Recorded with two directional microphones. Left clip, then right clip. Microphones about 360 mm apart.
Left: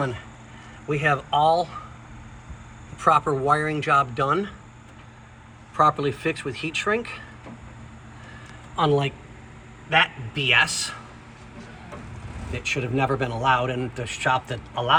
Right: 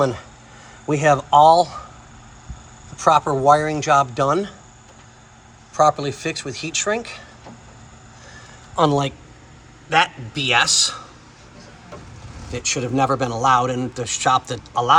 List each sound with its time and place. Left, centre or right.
0.9 s speech: centre
3.0 s a man's voice: centre
5.7 s a man's voice: centre
8.7 s a man's voice: centre
12.5 s a man's voice: centre